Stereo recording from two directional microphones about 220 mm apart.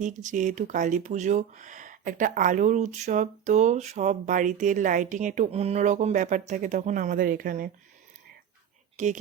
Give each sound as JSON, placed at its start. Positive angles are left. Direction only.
{"t": 0.0, "sound": "speech", "side_deg": -35}